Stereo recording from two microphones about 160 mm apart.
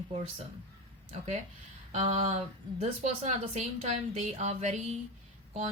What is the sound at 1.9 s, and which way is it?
A woman's voice, 45° right (ahead or behind).